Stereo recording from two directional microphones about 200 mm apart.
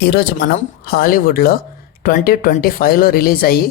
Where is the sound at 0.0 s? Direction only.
55° left (ahead or behind).